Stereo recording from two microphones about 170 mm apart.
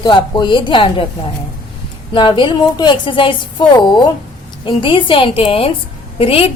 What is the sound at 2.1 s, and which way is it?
A woman's voice, 30° left (ahead or behind).